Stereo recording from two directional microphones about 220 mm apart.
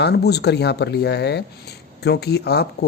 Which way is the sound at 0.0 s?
50° left (ahead or behind).